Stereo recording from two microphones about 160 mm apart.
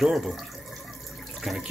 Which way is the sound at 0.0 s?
Centre (ahead or behind).